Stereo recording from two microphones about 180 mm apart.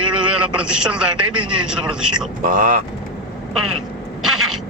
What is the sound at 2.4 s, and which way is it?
Speech, 50° right (ahead or behind).